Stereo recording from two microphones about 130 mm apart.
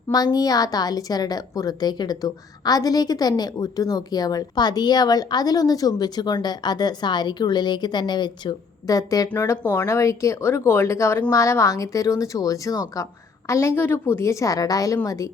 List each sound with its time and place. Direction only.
0.1 s a woman's voice: 30° left (ahead or behind)